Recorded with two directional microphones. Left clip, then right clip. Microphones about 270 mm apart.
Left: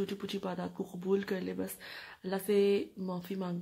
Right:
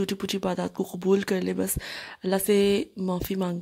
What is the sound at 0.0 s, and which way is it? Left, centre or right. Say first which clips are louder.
Speech: right 9 dB; right.